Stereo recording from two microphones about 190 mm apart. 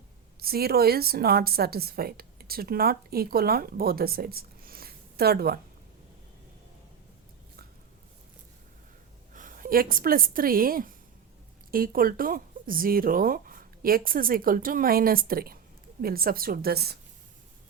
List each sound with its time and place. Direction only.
0.3 s a woman's voice: 55° right (ahead or behind)
9.3 s a woman's voice: 45° right (ahead or behind)